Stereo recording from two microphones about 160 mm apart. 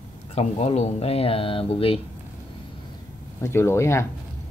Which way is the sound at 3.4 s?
15° left (ahead or behind).